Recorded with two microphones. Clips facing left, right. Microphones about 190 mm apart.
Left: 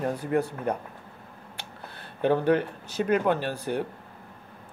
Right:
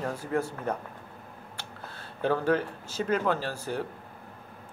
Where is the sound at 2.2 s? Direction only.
20° left (ahead or behind).